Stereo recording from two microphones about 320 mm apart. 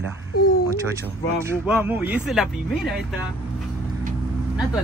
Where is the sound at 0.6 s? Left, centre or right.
Centre.